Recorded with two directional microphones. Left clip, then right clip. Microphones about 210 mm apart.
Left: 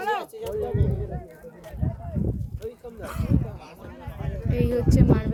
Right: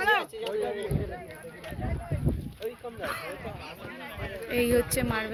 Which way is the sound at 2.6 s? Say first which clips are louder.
Right 1 dB; 50° left (ahead or behind).